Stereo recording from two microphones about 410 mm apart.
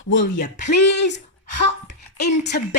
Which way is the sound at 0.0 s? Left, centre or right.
Left.